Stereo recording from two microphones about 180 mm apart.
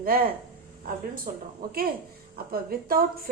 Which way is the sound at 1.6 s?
55° right (ahead or behind).